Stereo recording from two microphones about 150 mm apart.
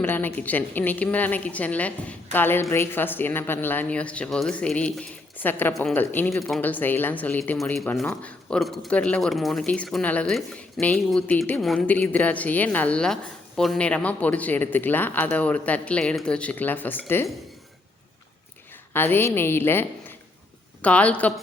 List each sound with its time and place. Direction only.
0.0 s a woman's voice: 15° left (ahead or behind)
18.9 s a woman's voice: 15° left (ahead or behind)